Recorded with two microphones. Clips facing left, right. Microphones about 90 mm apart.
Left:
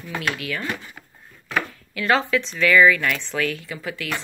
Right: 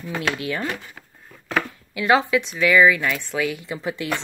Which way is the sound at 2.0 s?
15° right (ahead or behind).